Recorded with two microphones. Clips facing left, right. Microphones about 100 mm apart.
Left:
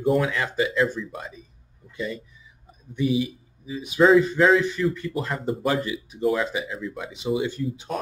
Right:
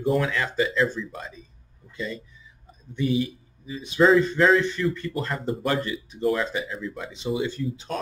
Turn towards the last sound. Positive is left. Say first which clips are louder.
# left 1 dB
turn(degrees=15)  # may be behind; listen again after turning